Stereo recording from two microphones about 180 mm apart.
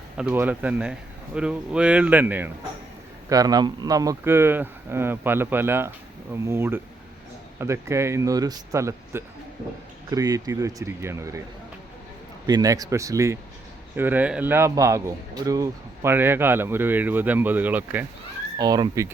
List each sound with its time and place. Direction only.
0.2 s speech: 10° right (ahead or behind)
12.5 s speech: 20° right (ahead or behind)
18.5 s speech: 25° right (ahead or behind)